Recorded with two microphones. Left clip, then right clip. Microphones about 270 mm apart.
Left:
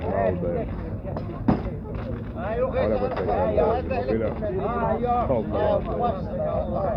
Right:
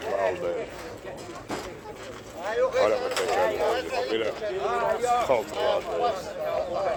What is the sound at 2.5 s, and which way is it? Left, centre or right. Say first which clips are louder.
Speech: right 1 dB; right.